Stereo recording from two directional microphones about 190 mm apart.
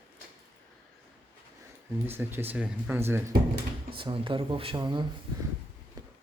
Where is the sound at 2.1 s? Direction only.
10° right (ahead or behind).